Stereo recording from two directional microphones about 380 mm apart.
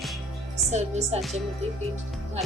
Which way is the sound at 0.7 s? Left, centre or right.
Centre.